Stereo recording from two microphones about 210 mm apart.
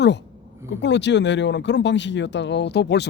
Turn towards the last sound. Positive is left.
turn(degrees=55)  # may be behind; listen again after turning